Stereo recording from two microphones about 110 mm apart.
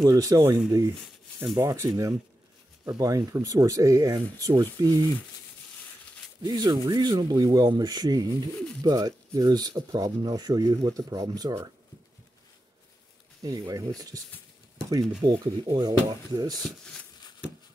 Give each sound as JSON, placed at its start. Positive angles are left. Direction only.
{"t": 0.0, "sound": "speech", "side_deg": -30}
{"t": 6.4, "sound": "speech", "side_deg": -35}
{"t": 13.4, "sound": "speech", "side_deg": -35}